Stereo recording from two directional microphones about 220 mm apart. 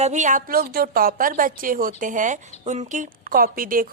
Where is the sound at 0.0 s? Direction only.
35° right (ahead or behind).